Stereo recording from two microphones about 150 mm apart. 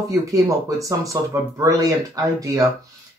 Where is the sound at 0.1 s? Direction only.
20° right (ahead or behind).